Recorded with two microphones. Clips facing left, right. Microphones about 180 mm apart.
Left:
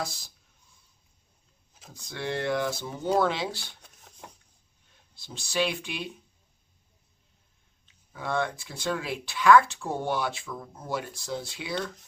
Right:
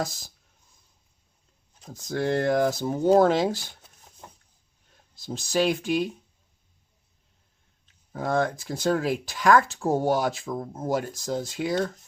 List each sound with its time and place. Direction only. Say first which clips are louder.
0.0 s speech: right 4 dB; 40° right (ahead or behind)
1.9 s speech: right 7 dB; 40° right (ahead or behind)
5.1 s speech: right 5 dB; 40° right (ahead or behind)
7.9 s speech: right 5 dB; 40° right (ahead or behind)